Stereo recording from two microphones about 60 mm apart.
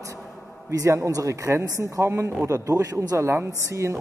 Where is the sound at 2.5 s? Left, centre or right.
Right.